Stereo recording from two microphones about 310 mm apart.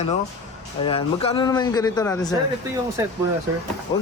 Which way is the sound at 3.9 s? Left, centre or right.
Centre.